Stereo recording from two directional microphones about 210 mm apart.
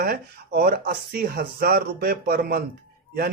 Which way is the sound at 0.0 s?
45° right (ahead or behind).